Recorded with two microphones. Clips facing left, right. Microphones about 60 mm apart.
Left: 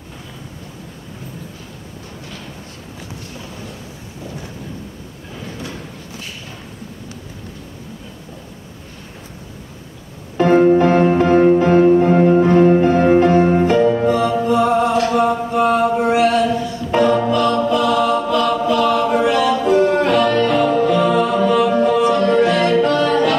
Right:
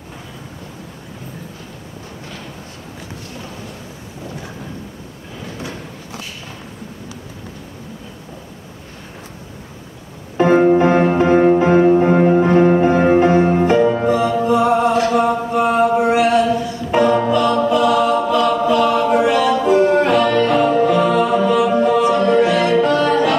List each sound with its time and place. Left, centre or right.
10.3 s music: centre
15.1 s a sound: centre
16.9 s music: centre